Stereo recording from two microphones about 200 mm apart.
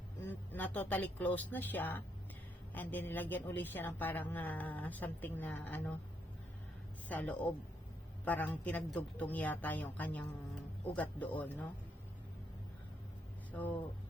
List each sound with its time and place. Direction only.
0.2 s speech: 10° left (ahead or behind)
7.1 s speech: 5° left (ahead or behind)
13.5 s speech: 10° left (ahead or behind)